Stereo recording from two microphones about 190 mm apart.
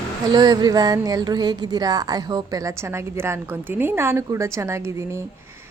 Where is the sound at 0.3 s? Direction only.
20° right (ahead or behind).